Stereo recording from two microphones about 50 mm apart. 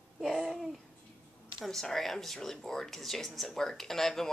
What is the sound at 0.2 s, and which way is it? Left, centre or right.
Babbling, centre.